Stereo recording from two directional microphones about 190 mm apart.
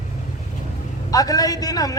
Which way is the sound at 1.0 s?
20° left (ahead or behind).